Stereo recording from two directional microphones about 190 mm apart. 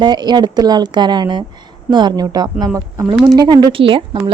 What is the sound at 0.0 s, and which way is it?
Speech, 20° right (ahead or behind).